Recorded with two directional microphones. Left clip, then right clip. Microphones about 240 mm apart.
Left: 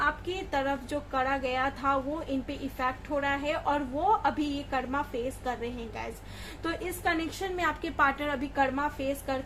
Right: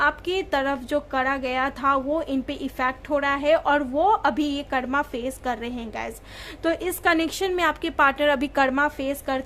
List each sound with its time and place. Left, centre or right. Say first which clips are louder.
0.0 s a woman's voice: right 7 dB; right